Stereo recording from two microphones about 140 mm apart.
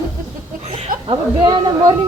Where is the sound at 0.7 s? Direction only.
40° right (ahead or behind).